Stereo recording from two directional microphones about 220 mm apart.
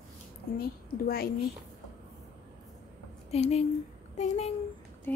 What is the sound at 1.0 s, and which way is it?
Speech, 45° left (ahead or behind).